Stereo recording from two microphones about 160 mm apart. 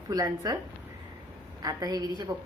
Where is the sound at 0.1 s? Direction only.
20° right (ahead or behind).